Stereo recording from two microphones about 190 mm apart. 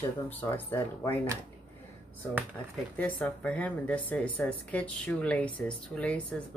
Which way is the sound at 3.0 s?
10° left (ahead or behind).